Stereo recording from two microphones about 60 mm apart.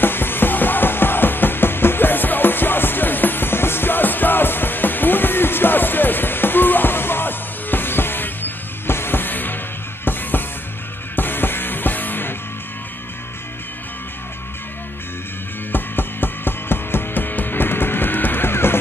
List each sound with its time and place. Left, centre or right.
0.0 s music: left
11.1 s music: left
15.7 s music: left